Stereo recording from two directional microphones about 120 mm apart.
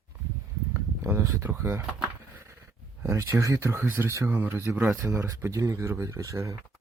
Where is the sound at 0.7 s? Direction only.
20° right (ahead or behind).